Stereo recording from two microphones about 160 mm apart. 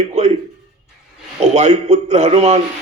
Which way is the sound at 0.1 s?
45° right (ahead or behind).